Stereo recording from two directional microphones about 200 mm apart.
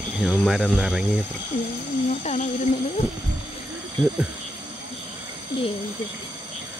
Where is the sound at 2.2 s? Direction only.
35° left (ahead or behind).